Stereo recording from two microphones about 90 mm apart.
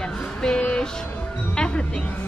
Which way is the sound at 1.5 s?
10° left (ahead or behind).